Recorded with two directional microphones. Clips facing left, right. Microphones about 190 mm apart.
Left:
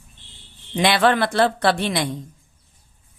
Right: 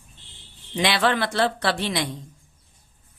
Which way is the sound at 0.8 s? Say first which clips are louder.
Left 4 dB; 50° left (ahead or behind).